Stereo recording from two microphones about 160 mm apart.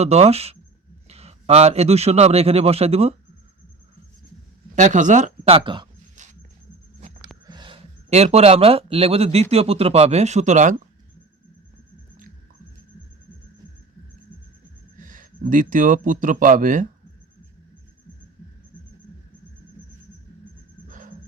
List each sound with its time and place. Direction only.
0.0 s a man's voice: 40° right (ahead or behind)
4.7 s speech: 50° right (ahead or behind)
5.5 s speech: 35° right (ahead or behind)
7.4 s speech: 30° right (ahead or behind); by 10.8 s 50° right (ahead or behind)
14.9 s speech: 55° right (ahead or behind)
20.8 s a sound: 55° right (ahead or behind)